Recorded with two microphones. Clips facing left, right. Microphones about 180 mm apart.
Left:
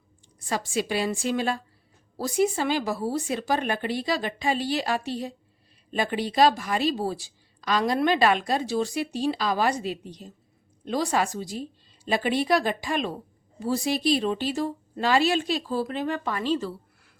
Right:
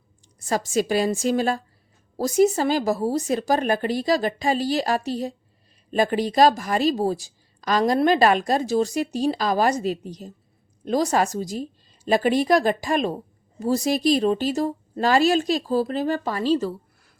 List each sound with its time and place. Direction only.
0.4 s a woman's voice: 45° right (ahead or behind)